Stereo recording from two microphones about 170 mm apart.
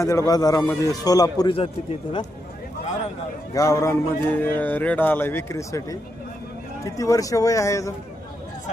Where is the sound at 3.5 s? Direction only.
15° left (ahead or behind).